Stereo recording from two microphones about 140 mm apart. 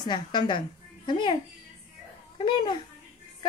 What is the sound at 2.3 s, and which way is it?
Speech, 35° left (ahead or behind).